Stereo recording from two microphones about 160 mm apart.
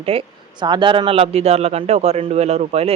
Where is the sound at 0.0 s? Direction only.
35° right (ahead or behind).